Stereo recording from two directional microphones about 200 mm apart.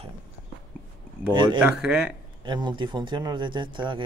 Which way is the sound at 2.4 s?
25° right (ahead or behind).